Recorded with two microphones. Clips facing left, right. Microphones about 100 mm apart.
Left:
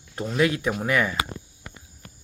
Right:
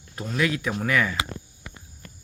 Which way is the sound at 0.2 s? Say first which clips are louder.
Left 3 dB; 30° left (ahead or behind).